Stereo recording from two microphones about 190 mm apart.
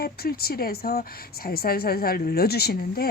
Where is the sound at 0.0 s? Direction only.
55° left (ahead or behind).